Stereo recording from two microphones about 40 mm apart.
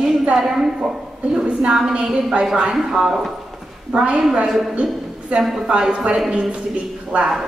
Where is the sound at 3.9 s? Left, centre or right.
Centre.